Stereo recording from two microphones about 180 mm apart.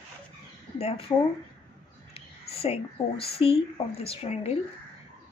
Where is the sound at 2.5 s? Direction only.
35° left (ahead or behind).